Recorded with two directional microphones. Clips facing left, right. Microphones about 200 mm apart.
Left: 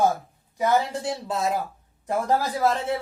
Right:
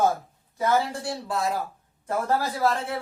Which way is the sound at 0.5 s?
15° left (ahead or behind).